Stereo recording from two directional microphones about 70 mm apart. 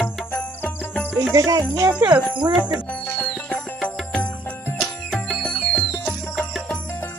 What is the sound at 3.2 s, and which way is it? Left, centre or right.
Music, centre.